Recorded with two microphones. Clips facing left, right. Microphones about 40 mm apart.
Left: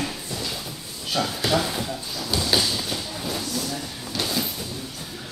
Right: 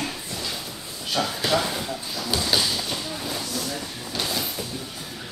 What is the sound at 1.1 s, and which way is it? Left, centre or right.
Speech, centre.